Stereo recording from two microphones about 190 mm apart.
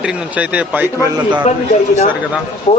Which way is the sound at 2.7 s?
30° left (ahead or behind).